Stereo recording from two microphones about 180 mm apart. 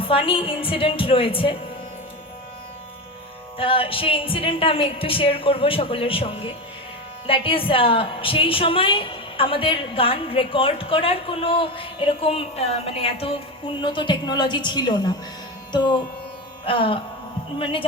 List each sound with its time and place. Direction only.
0.0 s a woman's voice: 30° left (ahead or behind)
3.6 s a woman's voice: 30° left (ahead or behind)
15.7 s music: 25° left (ahead or behind)
16.6 s a woman's voice: 30° left (ahead or behind)